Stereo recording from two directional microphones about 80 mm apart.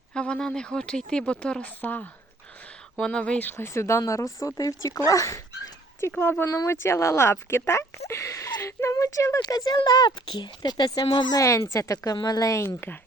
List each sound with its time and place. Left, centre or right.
0.1 s speech: centre
1.8 s speech: left
3.6 s speech: left
6.1 s speech: left
11.3 s speech: left
12.6 s speech: left